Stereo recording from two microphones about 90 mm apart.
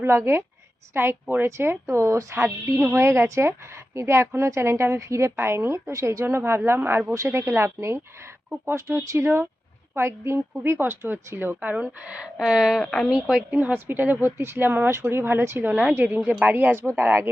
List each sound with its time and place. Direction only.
0.0 s a woman's voice: 30° right (ahead or behind); by 12.8 s 5° right (ahead or behind)
12.8 s a woman's voice: 5° left (ahead or behind)
13.1 s a woman's voice: 5° right (ahead or behind)
13.6 s a woman's voice: 20° right (ahead or behind)